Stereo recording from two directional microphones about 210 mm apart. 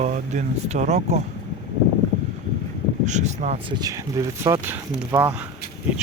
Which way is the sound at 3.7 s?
15° right (ahead or behind).